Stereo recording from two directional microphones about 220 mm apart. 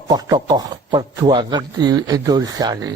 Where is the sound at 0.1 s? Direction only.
20° right (ahead or behind).